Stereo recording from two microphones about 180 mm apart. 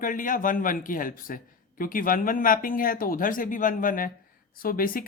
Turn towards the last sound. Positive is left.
turn(degrees=55)  # may be behind; listen again after turning